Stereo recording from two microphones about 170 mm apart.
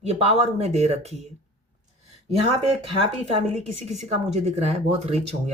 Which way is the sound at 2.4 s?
35° right (ahead or behind).